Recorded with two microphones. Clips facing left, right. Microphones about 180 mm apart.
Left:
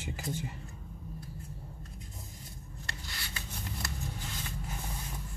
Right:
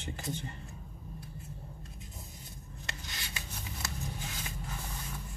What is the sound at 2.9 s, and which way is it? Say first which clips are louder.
Rub: even; 20° right (ahead or behind).